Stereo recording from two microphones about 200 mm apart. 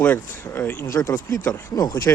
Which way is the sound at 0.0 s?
10° left (ahead or behind).